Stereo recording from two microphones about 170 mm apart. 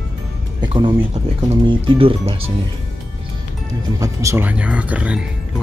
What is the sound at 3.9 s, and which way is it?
Speech, 20° right (ahead or behind).